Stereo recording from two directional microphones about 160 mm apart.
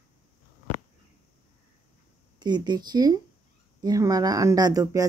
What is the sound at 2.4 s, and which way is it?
Speech, 25° right (ahead or behind).